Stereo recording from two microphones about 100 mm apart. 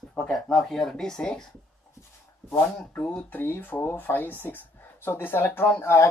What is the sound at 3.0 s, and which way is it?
Speech, 15° left (ahead or behind).